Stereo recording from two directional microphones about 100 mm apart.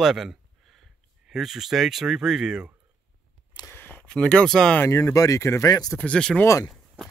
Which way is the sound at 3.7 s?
20° left (ahead or behind).